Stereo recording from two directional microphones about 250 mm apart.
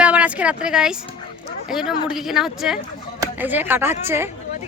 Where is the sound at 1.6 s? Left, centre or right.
Centre.